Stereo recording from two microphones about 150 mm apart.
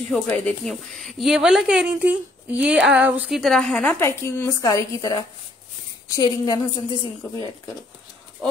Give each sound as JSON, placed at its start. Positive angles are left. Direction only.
{"t": 0.1, "sound": "a woman's voice", "side_deg": 5}